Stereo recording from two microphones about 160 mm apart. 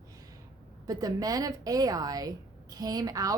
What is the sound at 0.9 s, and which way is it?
A woman's voice, 20° right (ahead or behind).